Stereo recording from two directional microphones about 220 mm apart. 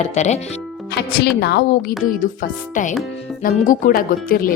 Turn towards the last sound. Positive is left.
turn(degrees=40)  # may be behind; listen again after turning